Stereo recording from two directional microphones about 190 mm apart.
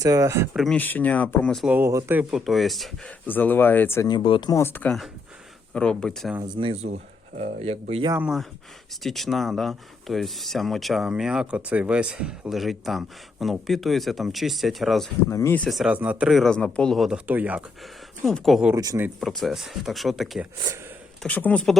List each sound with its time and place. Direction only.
0.0 s speech: 15° right (ahead or behind)
0.5 s speech: centre (ahead or behind)
1.7 s speech: 15° right (ahead or behind); by 4.2 s 15° left (ahead or behind)
4.2 s speech: 25° left (ahead or behind); by 6.3 s 5° left (ahead or behind)
6.4 s speech: 25° right (ahead or behind)
8.1 s speech: 5° right (ahead or behind)
15.3 s speech: 15° left (ahead or behind)
18.7 s speech: 15° right (ahead or behind)
19.2 s speech: centre (ahead or behind)